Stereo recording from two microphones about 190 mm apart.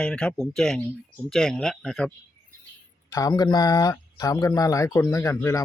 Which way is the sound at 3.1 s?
20° left (ahead or behind).